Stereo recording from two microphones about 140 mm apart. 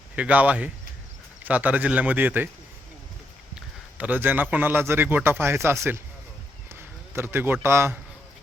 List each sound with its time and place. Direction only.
0.2 s a man's voice: 10° right (ahead or behind)
3.9 s a man's voice: 10° right (ahead or behind)